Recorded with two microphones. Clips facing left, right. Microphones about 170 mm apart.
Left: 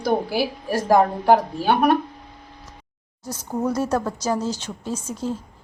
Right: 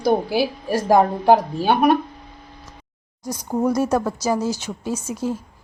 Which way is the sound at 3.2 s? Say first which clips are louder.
Right 4 dB; 15° right (ahead or behind).